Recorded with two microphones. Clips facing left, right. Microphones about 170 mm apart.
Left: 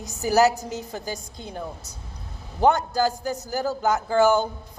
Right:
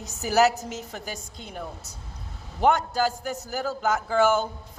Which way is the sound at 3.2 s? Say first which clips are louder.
Left 3 dB; 35° left (ahead or behind).